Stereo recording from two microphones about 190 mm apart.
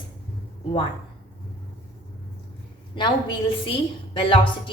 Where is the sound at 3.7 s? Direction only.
25° left (ahead or behind).